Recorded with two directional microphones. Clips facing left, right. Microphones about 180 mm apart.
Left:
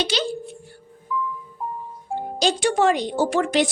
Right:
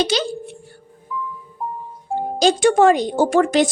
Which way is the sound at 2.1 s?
45° right (ahead or behind).